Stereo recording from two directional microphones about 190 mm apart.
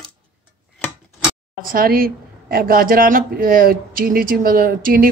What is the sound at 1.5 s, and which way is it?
Speech, 50° right (ahead or behind).